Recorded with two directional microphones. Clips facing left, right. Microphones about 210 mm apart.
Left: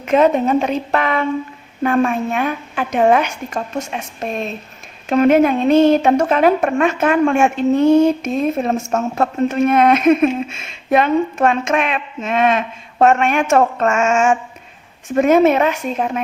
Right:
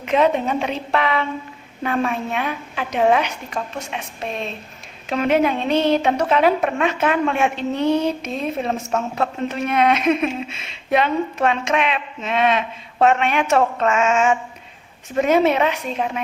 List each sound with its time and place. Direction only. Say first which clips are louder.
0.0 s a woman's voice: left 4 dB; 45° left (ahead or behind)